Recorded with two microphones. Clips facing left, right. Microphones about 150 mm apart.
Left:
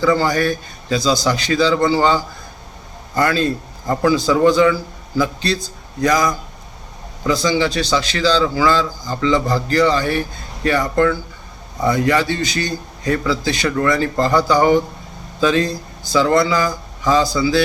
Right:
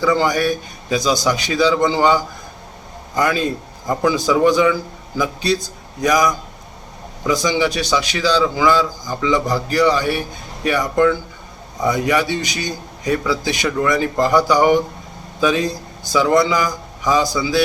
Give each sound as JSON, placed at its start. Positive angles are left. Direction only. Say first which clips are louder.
{"t": 0.0, "sound": "a man's voice", "louder": "left 1 dB", "side_deg": -15}